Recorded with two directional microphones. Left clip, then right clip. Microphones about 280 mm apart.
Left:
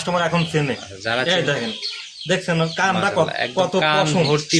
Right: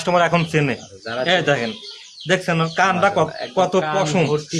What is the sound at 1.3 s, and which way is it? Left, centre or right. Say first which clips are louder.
Speech: right 7 dB; right.